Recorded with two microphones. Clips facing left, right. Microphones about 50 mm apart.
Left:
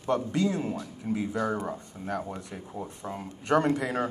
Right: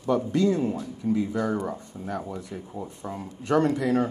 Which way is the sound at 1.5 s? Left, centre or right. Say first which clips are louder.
Right 3 dB; centre.